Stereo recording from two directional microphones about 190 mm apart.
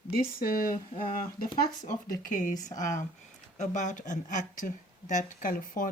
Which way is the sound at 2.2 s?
45° left (ahead or behind).